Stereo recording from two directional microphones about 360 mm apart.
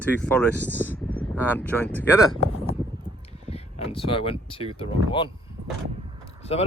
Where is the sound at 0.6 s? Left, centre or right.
Centre.